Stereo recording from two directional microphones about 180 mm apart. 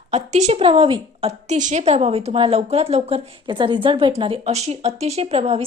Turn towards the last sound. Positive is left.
turn(degrees=-35)  # may be behind; listen again after turning